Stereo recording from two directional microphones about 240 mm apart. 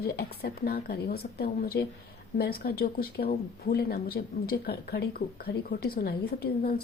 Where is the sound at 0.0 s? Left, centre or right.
Left.